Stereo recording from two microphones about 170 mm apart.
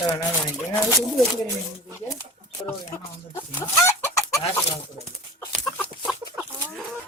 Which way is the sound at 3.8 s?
15° left (ahead or behind).